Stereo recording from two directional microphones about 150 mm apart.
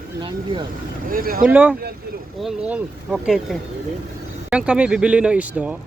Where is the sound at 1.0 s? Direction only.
70° right (ahead or behind).